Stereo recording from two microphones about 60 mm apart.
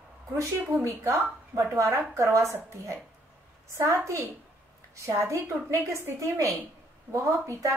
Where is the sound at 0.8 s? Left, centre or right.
Right.